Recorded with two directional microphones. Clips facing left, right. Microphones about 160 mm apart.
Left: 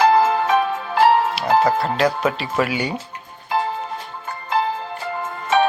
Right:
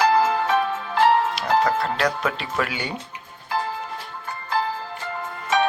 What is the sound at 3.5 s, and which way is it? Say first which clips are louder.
Music: left 4 dB; 20° left (ahead or behind).